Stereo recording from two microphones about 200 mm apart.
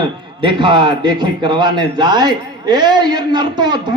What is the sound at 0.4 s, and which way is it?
A man's voice, 25° right (ahead or behind).